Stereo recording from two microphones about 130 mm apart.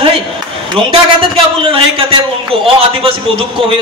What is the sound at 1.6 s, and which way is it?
A man's voice, 45° right (ahead or behind).